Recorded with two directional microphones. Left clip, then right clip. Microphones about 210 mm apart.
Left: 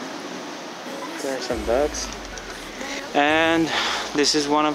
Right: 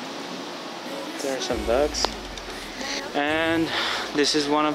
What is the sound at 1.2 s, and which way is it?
Music, 5° left (ahead or behind).